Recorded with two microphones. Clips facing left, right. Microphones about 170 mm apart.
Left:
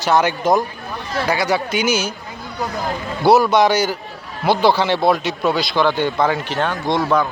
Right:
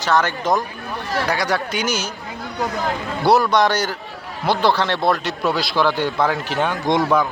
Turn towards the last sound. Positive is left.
turn(degrees=0)  # may be behind; listen again after turning